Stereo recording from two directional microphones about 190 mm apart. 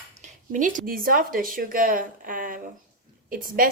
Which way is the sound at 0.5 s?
45° right (ahead or behind).